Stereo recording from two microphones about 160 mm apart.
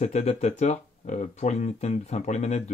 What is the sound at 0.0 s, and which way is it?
Speech, 45° left (ahead or behind).